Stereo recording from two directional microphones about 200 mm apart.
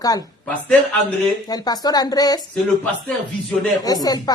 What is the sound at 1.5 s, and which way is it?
Speech, 20° left (ahead or behind).